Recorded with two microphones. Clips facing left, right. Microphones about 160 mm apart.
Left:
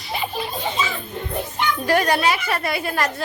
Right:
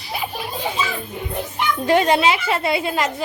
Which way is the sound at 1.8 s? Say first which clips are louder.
Right 3 dB; 20° right (ahead or behind).